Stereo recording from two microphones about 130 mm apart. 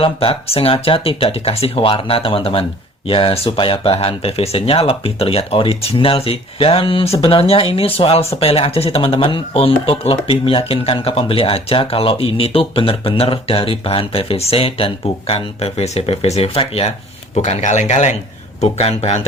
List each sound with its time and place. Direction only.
0.0 s speech: 45° left (ahead or behind)
17.3 s speech: 65° left (ahead or behind)